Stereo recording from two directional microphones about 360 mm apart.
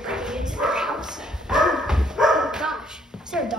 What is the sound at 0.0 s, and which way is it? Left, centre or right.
Dog, centre.